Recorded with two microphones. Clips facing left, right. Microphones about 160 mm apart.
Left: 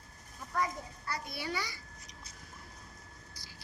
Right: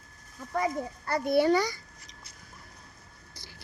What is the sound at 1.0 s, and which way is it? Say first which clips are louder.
Speech: right 16 dB; 55° right (ahead or behind).